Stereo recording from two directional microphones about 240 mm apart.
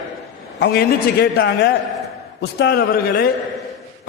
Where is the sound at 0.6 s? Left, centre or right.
Left.